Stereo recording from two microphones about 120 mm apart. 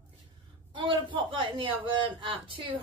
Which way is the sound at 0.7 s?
45° right (ahead or behind).